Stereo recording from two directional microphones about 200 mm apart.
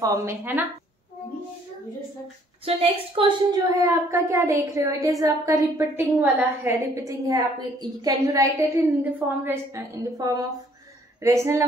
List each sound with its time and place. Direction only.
0.0 s a woman's voice: 15° right (ahead or behind)
2.6 s a woman's voice: 30° right (ahead or behind)
3.8 s a woman's voice: 15° right (ahead or behind)